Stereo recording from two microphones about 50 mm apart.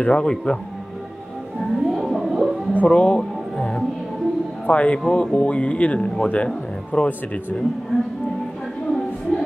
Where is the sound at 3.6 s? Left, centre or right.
Centre.